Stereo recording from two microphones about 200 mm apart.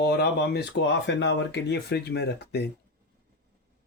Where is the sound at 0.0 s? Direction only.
55° left (ahead or behind).